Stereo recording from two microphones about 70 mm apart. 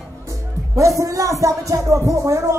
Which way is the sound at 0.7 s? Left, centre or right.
Right.